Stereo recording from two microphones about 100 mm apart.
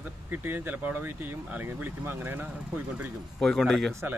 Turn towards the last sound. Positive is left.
turn(degrees=0)  # may be behind; listen again after turning